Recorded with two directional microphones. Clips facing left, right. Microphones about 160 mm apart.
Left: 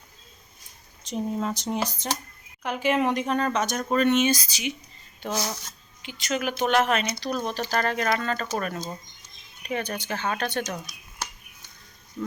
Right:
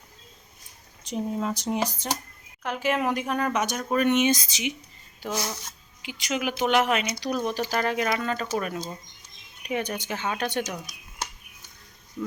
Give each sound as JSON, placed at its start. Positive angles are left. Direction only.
{"t": 1.1, "sound": "speech", "side_deg": -5}
{"t": 2.6, "sound": "speech", "side_deg": 0}
{"t": 5.2, "sound": "speech", "side_deg": -5}
{"t": 12.2, "sound": "speech", "side_deg": -10}